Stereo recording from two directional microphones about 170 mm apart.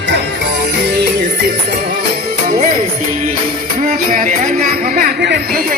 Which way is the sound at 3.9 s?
50° right (ahead or behind).